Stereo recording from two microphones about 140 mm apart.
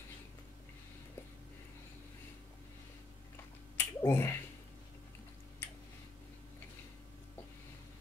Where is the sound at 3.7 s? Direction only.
20° left (ahead or behind).